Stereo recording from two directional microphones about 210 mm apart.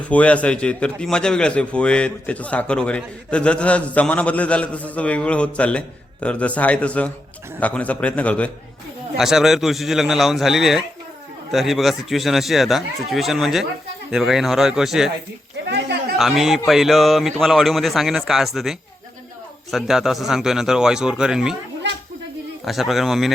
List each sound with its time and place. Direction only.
0.1 s a man's voice: 5° left (ahead or behind)
15.7 s a sound: 50° right (ahead or behind)
16.1 s a man's voice: centre (ahead or behind)
22.6 s a man's voice: centre (ahead or behind)